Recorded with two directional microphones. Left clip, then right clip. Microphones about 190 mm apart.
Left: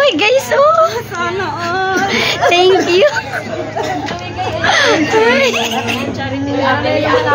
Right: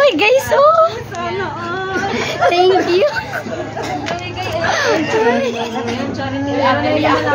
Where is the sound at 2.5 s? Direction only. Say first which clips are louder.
Left 3 dB; 5° left (ahead or behind).